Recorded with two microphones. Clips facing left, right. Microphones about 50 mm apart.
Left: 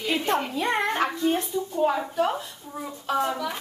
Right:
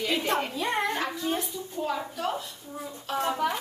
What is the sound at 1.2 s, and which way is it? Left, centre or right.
A woman's voice, left.